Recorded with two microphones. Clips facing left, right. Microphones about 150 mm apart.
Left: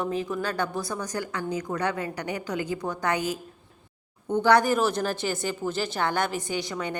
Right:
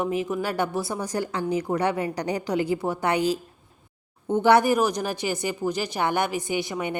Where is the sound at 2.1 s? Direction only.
35° right (ahead or behind).